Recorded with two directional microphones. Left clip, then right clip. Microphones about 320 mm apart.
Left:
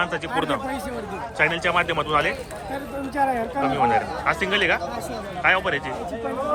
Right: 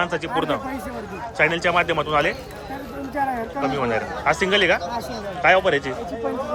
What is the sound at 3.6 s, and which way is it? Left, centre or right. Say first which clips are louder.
A man's voice: left 3 dB; centre.